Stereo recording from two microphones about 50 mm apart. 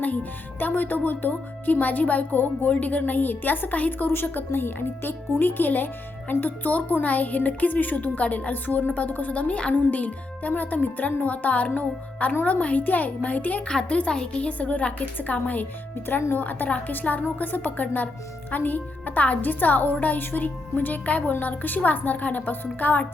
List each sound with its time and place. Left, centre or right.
0.0 s speech: left
13.7 s a woman's voice: left